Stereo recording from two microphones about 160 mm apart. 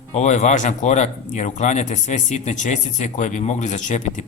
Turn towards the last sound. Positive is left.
turn(degrees=50)  # may be behind; listen again after turning